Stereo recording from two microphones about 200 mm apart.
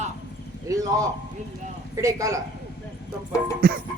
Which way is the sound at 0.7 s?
15° right (ahead or behind).